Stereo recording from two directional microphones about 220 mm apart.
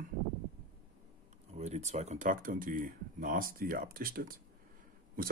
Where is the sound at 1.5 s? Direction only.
30° right (ahead or behind).